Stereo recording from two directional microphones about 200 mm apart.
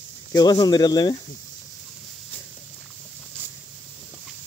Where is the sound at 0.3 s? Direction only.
20° left (ahead or behind).